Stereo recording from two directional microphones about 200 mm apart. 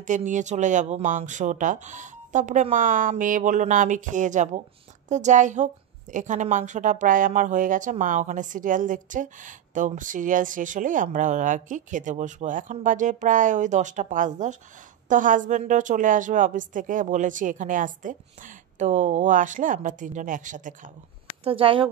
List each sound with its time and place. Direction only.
0.0 s a woman's voice: 40° right (ahead or behind)
21.5 s speech: 25° right (ahead or behind)